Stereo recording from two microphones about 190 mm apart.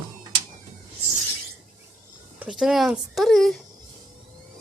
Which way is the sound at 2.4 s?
5° right (ahead or behind).